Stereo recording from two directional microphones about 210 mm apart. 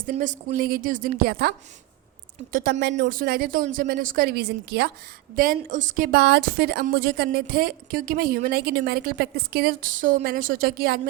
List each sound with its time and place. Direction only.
0.1 s a woman's voice: 40° right (ahead or behind)